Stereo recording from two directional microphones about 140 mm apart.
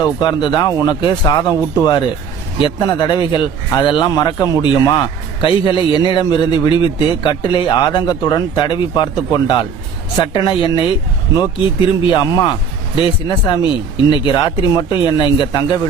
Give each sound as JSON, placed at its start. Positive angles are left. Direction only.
{"t": 0.0, "sound": "a man's voice", "side_deg": 30}
{"t": 12.1, "sound": "a man's voice", "side_deg": 30}